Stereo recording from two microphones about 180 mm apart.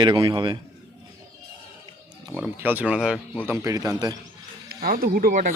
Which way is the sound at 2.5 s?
10° right (ahead or behind).